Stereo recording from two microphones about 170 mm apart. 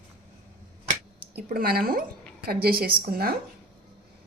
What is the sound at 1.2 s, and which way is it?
A woman's voice, 60° right (ahead or behind).